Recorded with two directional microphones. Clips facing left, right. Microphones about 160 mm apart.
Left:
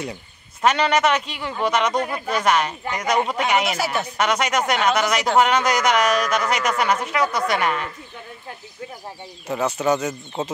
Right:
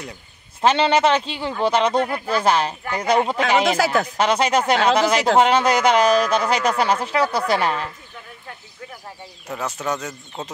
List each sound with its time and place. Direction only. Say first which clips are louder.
0.6 s speech: right 2 dB; 30° right (ahead or behind)
3.8 s speech: right 4 dB; 90° right
4.2 s speech: right 2 dB; 30° right (ahead or behind)
9.5 s speech: left 5 dB; centre (ahead or behind)